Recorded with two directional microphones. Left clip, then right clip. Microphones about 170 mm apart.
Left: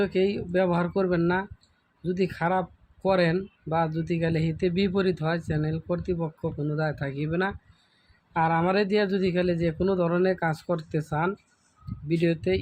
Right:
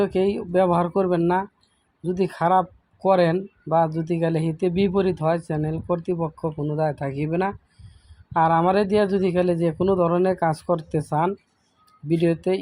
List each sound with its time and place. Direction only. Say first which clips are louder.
0.0 s speech: right 3 dB; 20° right (ahead or behind)